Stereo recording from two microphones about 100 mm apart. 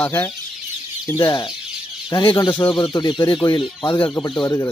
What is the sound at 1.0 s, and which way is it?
Speech, 30° left (ahead or behind).